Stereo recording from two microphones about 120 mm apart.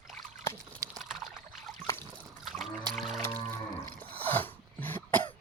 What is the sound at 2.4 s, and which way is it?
Music, centre (ahead or behind).